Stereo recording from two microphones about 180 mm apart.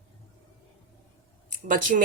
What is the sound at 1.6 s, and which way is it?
Speech, 45° right (ahead or behind).